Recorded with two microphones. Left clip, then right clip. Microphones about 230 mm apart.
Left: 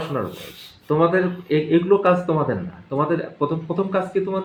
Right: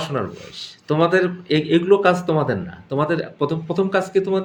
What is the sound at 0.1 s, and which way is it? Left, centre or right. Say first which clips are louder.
Speech: right 1 dB; right.